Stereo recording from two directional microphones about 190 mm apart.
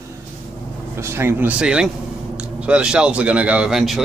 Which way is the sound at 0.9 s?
10° right (ahead or behind).